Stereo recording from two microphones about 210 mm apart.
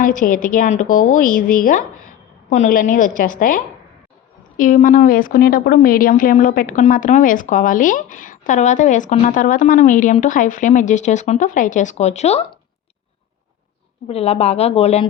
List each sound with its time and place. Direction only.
0.0 s a woman's voice: 40° left (ahead or behind)
14.1 s speech: 30° left (ahead or behind)